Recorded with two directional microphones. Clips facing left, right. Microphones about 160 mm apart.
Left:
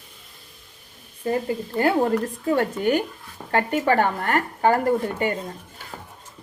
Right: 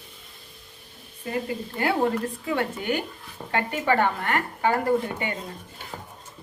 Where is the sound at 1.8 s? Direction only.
40° left (ahead or behind).